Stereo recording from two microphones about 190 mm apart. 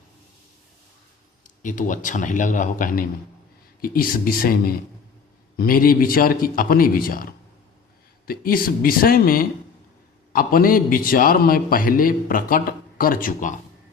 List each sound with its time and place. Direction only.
1.6 s a man's voice: 45° left (ahead or behind)
8.3 s a man's voice: 50° left (ahead or behind)